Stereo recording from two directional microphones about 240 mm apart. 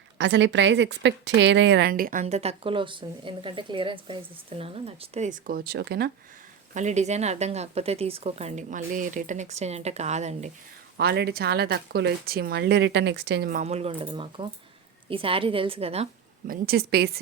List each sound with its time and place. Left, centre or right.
0.2 s a woman's voice: right
6.7 s speech: right
10.9 s speech: right
16.5 s a woman's voice: right